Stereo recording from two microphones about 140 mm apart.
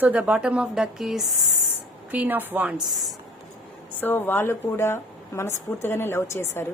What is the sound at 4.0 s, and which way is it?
A woman's voice, 15° left (ahead or behind).